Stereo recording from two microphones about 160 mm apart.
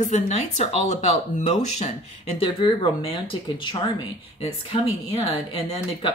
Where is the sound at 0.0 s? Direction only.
45° left (ahead or behind).